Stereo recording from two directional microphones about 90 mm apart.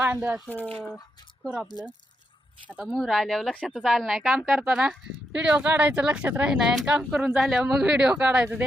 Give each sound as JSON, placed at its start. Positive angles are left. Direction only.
{"t": 0.0, "sound": "speech", "side_deg": -20}
{"t": 0.4, "sound": "speech", "side_deg": 20}
{"t": 2.8, "sound": "speech", "side_deg": 0}